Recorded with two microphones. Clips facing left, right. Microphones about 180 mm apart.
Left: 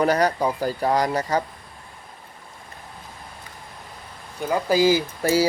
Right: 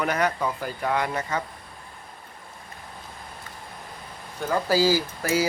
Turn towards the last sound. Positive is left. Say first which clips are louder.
# left 4 dB
turn(degrees=30)  # may be behind; listen again after turning